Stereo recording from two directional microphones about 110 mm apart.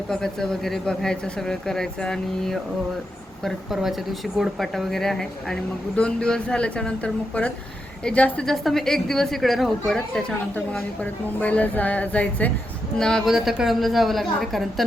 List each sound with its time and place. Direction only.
0.1 s a woman's voice: 5° left (ahead or behind)